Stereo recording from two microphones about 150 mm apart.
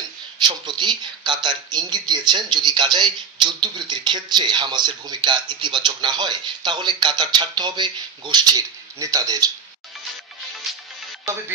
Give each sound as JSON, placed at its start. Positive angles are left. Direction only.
{"t": 0.4, "sound": "speech", "side_deg": -30}